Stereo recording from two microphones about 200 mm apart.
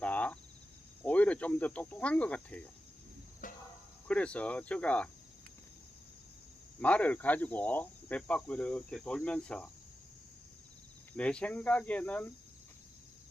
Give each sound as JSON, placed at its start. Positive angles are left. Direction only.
{"t": 0.0, "sound": "cricket", "side_deg": 5}
{"t": 3.4, "sound": "cricket", "side_deg": 40}
{"t": 4.1, "sound": "speech", "side_deg": 5}
{"t": 6.7, "sound": "speech", "side_deg": 5}
{"t": 11.2, "sound": "speech", "side_deg": 5}